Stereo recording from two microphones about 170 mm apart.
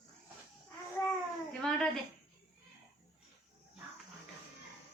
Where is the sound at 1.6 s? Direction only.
5° left (ahead or behind).